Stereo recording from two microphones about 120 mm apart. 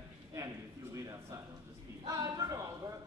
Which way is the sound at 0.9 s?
25° right (ahead or behind).